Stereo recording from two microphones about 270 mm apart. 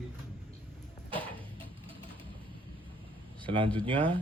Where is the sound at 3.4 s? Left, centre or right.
Centre.